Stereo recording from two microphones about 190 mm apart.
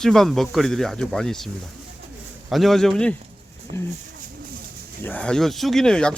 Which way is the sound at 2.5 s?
Centre (ahead or behind).